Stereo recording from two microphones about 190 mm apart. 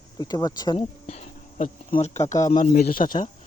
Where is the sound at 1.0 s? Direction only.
35° left (ahead or behind).